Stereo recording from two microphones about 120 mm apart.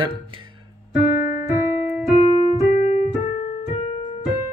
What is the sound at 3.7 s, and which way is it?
Keyboard, 55° left (ahead or behind).